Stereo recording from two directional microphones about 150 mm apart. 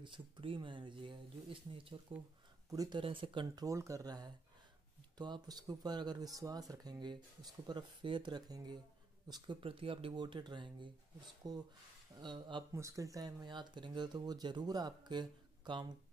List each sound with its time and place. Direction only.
0.0 s speech: 35° right (ahead or behind)
2.7 s speech: 25° right (ahead or behind)
3.0 s speech: 35° right (ahead or behind)
12.7 s speech: 20° right (ahead or behind)